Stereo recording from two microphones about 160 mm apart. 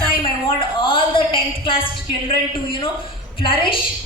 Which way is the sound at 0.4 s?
30° left (ahead or behind).